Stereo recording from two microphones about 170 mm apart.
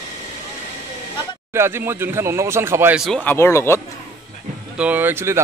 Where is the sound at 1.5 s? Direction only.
15° right (ahead or behind).